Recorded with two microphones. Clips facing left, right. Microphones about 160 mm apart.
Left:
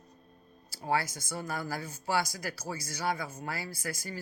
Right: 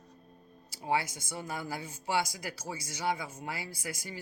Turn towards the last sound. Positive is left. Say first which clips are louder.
# left 2 dB
turn(degrees=-20)  # may be behind; listen again after turning